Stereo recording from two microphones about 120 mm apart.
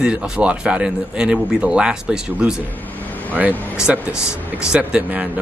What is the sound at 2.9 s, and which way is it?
Vehicle, 15° left (ahead or behind).